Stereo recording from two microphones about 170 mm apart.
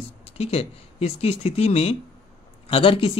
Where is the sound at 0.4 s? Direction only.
35° left (ahead or behind).